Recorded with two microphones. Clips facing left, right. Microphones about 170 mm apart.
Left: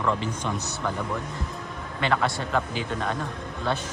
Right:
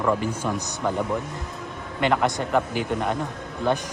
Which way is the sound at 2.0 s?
15° right (ahead or behind).